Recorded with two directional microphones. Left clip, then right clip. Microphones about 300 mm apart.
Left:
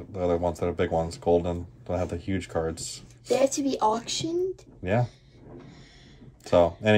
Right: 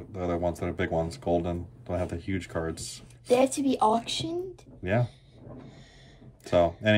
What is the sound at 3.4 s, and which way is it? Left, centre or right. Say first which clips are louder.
A woman's voice: left 3 dB; right.